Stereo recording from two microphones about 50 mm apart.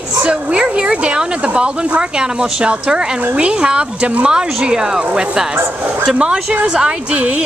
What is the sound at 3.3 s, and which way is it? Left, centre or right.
Speech, right.